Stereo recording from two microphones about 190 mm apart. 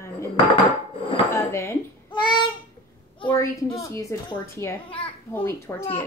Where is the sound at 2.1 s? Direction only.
25° left (ahead or behind).